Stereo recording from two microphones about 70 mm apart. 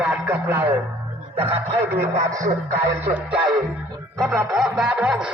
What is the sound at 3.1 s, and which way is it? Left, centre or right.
Speech, centre.